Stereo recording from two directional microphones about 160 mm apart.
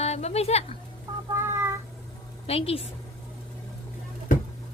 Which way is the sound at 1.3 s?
15° right (ahead or behind).